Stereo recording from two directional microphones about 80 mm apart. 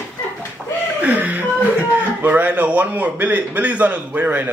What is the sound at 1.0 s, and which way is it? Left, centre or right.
A man's voice, right.